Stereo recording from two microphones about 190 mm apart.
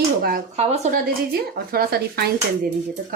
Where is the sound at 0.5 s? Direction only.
35° right (ahead or behind); by 2.3 s 55° right (ahead or behind).